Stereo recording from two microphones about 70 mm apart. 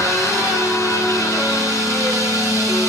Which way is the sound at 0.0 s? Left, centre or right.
Left.